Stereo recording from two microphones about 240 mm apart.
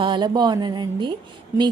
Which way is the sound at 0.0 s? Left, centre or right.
Centre.